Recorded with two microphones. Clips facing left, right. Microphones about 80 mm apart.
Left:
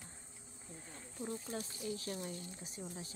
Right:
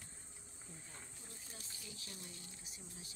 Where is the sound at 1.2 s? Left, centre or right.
Left.